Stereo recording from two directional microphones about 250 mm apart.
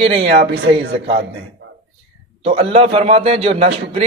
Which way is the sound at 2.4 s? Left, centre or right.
Right.